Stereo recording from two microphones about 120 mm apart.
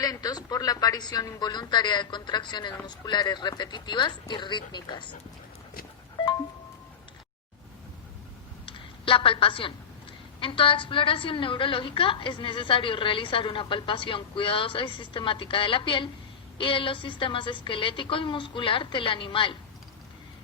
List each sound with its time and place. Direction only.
0.0 s a woman's voice: 30° left (ahead or behind)
8.6 s a sound: 45° left (ahead or behind)
10.4 s a woman's voice: 45° left (ahead or behind)